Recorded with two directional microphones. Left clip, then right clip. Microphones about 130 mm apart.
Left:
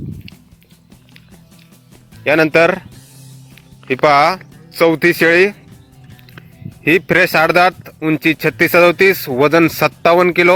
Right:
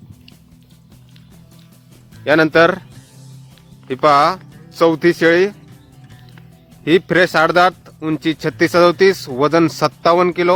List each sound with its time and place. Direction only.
2.2 s speech: 15° left (ahead or behind)
3.8 s speech: 15° left (ahead or behind)
6.8 s speech: 15° left (ahead or behind)
7.9 s speech: 5° left (ahead or behind)
8.2 s speech: 20° left (ahead or behind)